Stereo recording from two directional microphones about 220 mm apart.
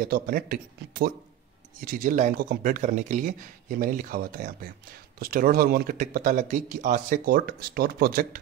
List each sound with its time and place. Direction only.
0.0 s speech: 40° right (ahead or behind)